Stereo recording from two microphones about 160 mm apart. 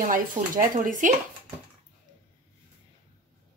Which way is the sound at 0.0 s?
55° right (ahead or behind).